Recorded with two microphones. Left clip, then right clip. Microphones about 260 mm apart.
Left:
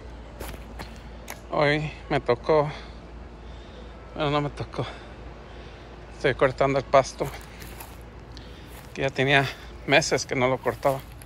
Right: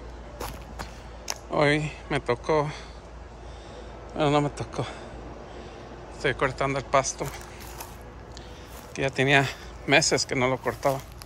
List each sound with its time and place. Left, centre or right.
0.7 s a sound: centre
4.2 s speech: centre
6.2 s speech: centre
8.9 s speech: centre